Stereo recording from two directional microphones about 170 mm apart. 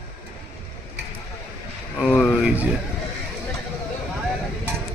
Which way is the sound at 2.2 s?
5° right (ahead or behind).